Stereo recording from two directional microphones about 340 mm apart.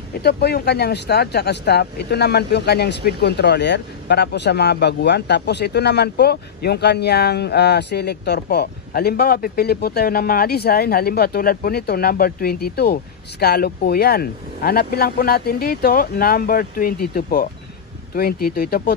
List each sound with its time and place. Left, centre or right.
0.2 s speech: left